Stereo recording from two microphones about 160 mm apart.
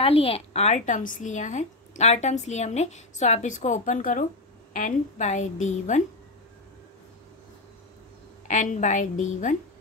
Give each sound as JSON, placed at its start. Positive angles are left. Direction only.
{"t": 0.0, "sound": "a woman's voice", "side_deg": 35}
{"t": 8.5, "sound": "a woman's voice", "side_deg": 50}